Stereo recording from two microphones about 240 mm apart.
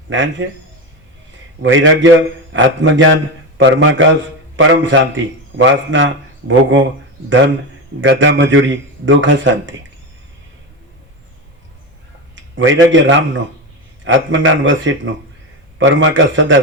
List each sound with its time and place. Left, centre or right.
0.1 s a man's voice: right
1.6 s a man's voice: right
8.0 s a man's voice: right
12.5 s a man's voice: right